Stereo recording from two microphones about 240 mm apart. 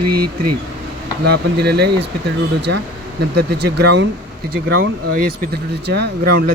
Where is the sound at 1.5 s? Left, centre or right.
Right.